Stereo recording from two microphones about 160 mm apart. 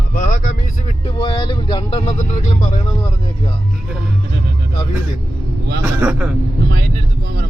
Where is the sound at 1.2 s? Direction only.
30° left (ahead or behind).